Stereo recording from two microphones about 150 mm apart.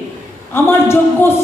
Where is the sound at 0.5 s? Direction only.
15° left (ahead or behind).